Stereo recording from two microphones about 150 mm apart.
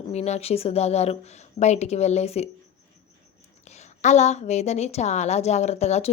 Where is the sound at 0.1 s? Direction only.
45° left (ahead or behind).